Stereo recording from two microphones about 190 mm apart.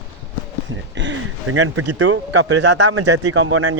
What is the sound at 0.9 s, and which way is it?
Speech, 85° right.